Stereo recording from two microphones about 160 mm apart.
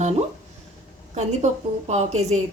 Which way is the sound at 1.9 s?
45° right (ahead or behind).